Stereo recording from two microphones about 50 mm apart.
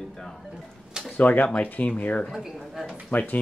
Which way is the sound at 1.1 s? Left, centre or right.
Left.